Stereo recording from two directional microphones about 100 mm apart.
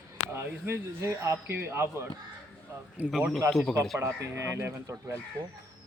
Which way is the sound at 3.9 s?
30° right (ahead or behind).